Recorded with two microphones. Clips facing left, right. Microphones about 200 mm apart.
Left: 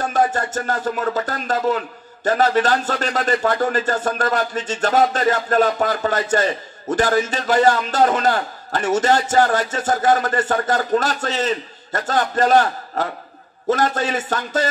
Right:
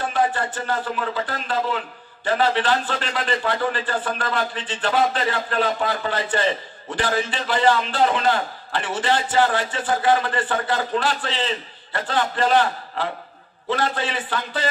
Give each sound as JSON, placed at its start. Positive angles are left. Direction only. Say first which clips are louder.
{"t": 0.0, "sound": "a man's voice", "louder": "left 3 dB", "side_deg": 45}